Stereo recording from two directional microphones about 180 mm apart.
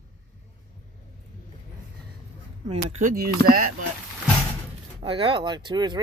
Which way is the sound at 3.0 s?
50° right (ahead or behind).